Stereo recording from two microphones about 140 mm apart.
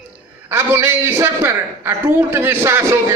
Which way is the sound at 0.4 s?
15° right (ahead or behind).